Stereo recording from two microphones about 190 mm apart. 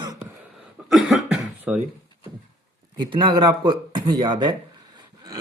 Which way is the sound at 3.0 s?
25° right (ahead or behind).